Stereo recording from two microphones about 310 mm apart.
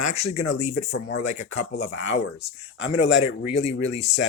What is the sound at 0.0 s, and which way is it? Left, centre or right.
Speech, centre.